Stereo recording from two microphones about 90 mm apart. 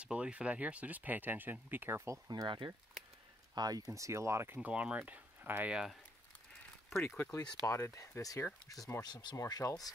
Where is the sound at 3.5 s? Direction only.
45° right (ahead or behind); by 5.7 s 20° right (ahead or behind).